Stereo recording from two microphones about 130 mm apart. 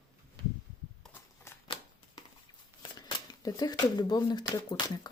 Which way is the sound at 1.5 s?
20° left (ahead or behind).